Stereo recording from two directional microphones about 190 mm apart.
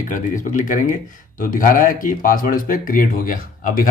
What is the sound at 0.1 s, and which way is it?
Speech, 45° left (ahead or behind).